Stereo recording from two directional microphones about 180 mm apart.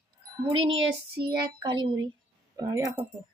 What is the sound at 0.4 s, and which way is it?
Speech, 30° right (ahead or behind).